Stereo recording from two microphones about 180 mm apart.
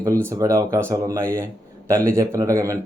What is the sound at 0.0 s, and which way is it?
Speech, 15° right (ahead or behind).